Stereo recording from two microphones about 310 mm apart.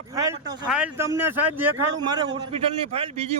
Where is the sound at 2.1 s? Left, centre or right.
Centre.